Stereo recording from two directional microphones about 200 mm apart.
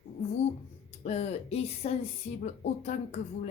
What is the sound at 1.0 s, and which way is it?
A woman's voice, 30° left (ahead or behind).